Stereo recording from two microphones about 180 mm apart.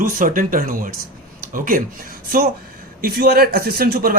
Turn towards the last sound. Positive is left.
turn(degrees=-55)  # may be behind; listen again after turning